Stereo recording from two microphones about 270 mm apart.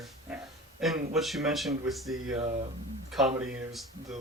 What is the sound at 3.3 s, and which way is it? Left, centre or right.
Speech, centre.